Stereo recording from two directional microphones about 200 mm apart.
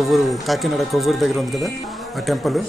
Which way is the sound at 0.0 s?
Centre (ahead or behind).